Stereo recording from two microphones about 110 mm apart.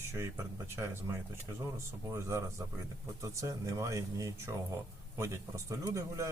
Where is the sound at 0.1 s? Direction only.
25° right (ahead or behind).